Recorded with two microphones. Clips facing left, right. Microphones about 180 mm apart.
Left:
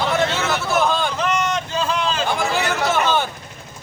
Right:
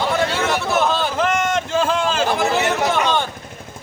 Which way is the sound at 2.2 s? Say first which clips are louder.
Right 3 dB; centre (ahead or behind).